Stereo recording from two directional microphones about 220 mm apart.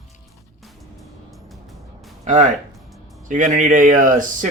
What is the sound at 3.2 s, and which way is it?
Speech, 35° right (ahead or behind).